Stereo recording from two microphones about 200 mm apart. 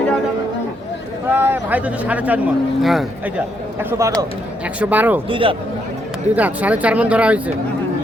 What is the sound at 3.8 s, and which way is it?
Speech, 15° right (ahead or behind).